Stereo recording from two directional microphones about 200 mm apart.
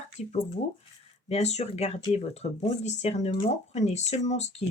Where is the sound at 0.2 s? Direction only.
35° left (ahead or behind).